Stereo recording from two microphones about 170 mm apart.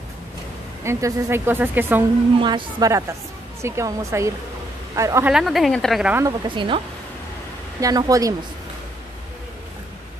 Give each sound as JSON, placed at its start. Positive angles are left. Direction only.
{"t": 0.8, "sound": "speech", "side_deg": -15}
{"t": 2.3, "sound": "a woman's voice", "side_deg": -30}
{"t": 5.3, "sound": "a woman's voice", "side_deg": 0}
{"t": 6.4, "sound": "a woman's voice", "side_deg": -30}
{"t": 7.8, "sound": "a woman's voice", "side_deg": -20}